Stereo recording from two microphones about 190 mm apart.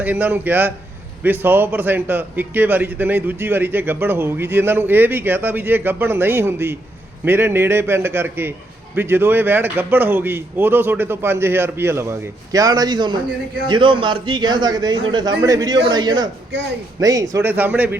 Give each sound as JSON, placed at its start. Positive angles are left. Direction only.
{"t": 0.0, "sound": "a man's voice", "side_deg": -10}